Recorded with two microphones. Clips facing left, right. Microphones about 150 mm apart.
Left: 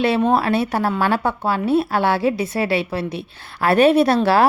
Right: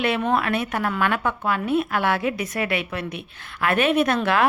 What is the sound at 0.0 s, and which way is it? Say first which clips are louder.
A woman's voice: left 5 dB; 30° left (ahead or behind).